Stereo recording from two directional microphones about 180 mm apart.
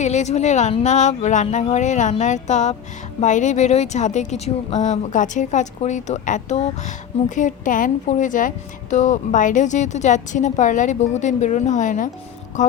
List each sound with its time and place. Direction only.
0.0 s speech: 40° left (ahead or behind)